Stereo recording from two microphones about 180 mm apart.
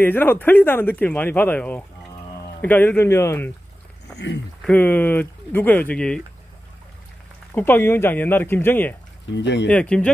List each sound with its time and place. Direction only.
0.0 s speech: 10° left (ahead or behind)
4.6 s speech: 5° left (ahead or behind)
7.5 s speech: 10° left (ahead or behind)
9.3 s speech: 80° left
9.7 s speech: 5° left (ahead or behind)